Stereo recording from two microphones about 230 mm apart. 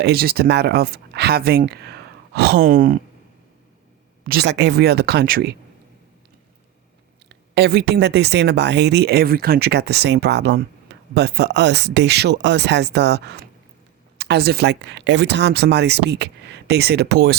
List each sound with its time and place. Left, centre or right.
0.0 s speech: right
4.2 s speech: right
7.3 s speech: right